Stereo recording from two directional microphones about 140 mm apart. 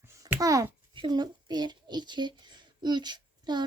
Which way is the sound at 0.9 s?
30° right (ahead or behind).